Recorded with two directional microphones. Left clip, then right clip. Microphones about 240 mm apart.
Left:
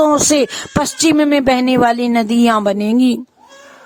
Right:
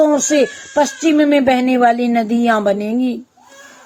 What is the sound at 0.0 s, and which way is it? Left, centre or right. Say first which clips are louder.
Speech: left 1 dB; left.